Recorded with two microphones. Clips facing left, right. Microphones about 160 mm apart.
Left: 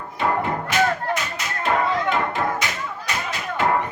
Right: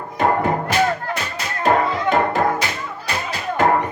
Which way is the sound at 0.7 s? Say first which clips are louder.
Right 2 dB; 35° right (ahead or behind).